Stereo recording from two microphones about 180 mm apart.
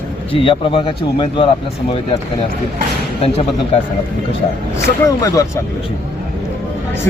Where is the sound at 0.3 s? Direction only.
30° left (ahead or behind).